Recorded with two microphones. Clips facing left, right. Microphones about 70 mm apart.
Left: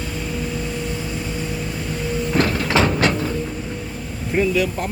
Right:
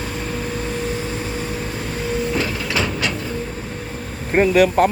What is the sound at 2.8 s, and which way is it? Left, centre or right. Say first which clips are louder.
Train: left 5 dB; left.